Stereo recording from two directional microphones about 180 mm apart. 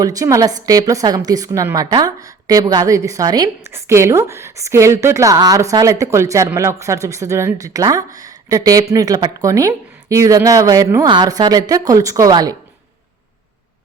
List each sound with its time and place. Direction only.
0.0 s a woman's voice: 20° right (ahead or behind)